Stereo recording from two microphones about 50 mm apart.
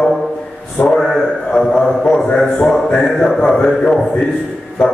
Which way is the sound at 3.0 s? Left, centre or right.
Centre.